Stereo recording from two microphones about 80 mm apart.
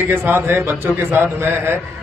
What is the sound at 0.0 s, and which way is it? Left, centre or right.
A man's voice, right.